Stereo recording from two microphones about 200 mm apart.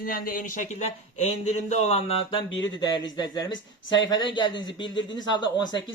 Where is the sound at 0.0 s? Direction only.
45° left (ahead or behind).